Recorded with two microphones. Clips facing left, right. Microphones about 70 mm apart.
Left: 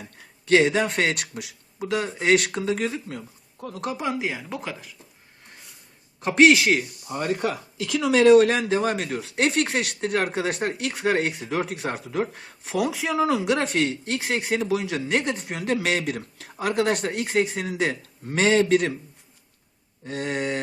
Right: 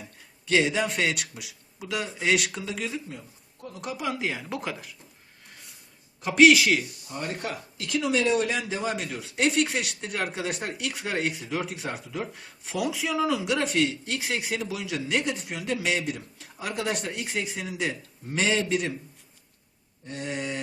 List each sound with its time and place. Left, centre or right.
0.4 s speech: left
3.1 s speech: left
3.9 s speech: left
4.2 s speech: centre
6.1 s speech: left
7.1 s a sound: left
8.0 s speech: left
20.1 s a sound: left
20.3 s speech: left